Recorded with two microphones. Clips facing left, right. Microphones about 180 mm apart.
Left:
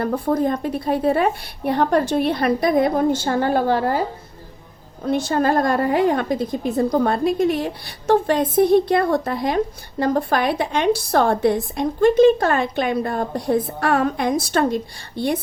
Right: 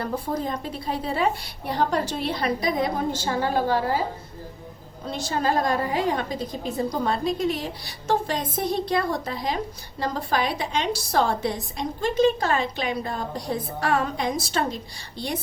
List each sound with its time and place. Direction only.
0.0 s a woman's voice: 55° left (ahead or behind)
5.0 s a woman's voice: 55° left (ahead or behind)